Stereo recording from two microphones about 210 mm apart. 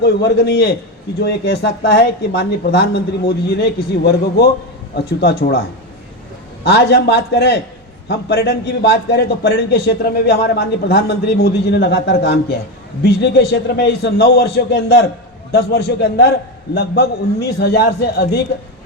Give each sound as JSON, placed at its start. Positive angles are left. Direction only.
{"t": 0.0, "sound": "a man's voice", "side_deg": 50}
{"t": 6.7, "sound": "a man's voice", "side_deg": 50}